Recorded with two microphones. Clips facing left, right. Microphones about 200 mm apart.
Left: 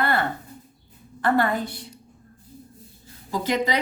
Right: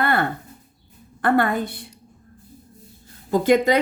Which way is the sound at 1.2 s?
55° right (ahead or behind).